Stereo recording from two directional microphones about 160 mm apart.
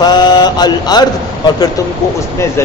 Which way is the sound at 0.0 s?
25° left (ahead or behind).